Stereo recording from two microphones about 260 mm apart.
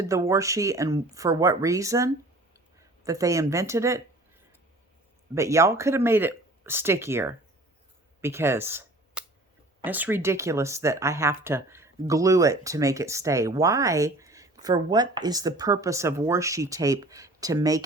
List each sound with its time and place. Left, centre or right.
0.0 s speech: centre
5.3 s speech: centre